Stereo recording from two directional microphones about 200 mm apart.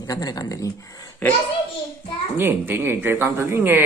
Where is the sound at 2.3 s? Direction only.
10° right (ahead or behind).